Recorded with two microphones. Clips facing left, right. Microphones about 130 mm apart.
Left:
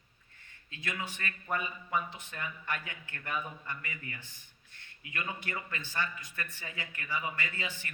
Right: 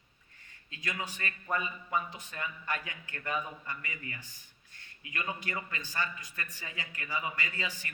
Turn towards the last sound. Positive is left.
turn(degrees=-40)  # may be behind; listen again after turning